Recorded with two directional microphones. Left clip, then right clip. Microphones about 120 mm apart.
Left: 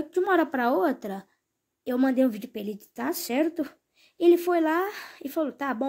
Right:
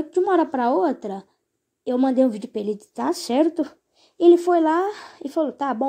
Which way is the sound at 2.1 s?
10° right (ahead or behind).